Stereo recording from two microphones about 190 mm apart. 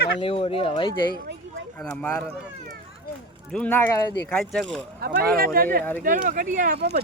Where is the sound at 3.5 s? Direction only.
10° left (ahead or behind).